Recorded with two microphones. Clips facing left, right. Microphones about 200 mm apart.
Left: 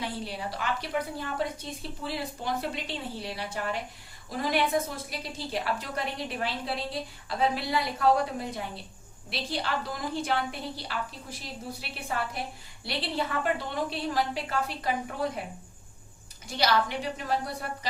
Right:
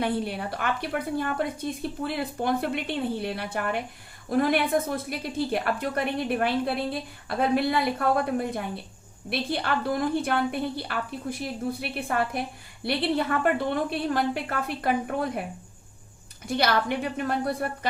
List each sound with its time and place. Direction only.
0.0 s a woman's voice: 55° right (ahead or behind)
16.5 s a woman's voice: 55° right (ahead or behind)